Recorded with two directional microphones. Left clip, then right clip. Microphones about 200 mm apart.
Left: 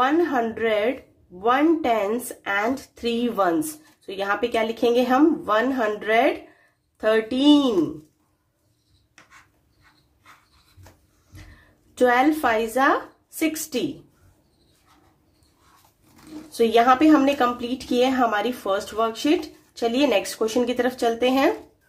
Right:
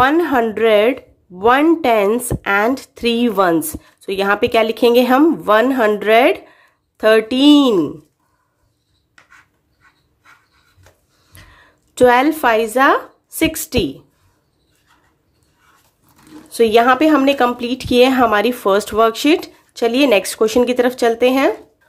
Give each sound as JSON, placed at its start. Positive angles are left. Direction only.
{"t": 0.0, "sound": "speech", "side_deg": -35}
{"t": 11.9, "sound": "speech", "side_deg": -30}
{"t": 16.5, "sound": "speech", "side_deg": -30}